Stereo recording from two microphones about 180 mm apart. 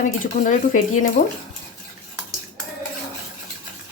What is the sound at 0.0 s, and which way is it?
Speech, 45° left (ahead or behind).